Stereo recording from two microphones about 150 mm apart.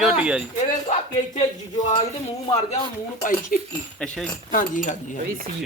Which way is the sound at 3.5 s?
70° left (ahead or behind).